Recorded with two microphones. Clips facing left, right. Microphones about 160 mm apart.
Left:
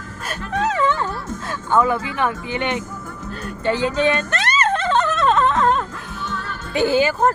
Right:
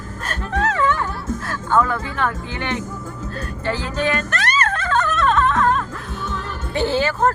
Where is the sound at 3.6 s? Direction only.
20° left (ahead or behind).